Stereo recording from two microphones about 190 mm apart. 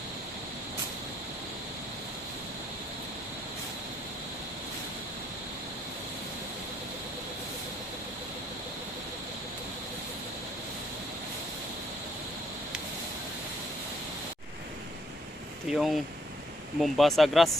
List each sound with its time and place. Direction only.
15.7 s speech: 5° right (ahead or behind)